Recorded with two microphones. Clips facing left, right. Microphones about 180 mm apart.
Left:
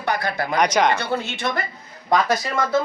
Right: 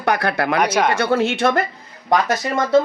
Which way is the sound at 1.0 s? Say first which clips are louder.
Right 8 dB; 75° right (ahead or behind).